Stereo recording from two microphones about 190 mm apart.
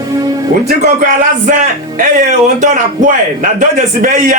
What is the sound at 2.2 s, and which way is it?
A man's voice, 40° right (ahead or behind).